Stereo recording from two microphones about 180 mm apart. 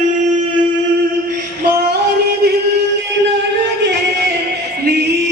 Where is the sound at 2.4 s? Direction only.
65° right (ahead or behind).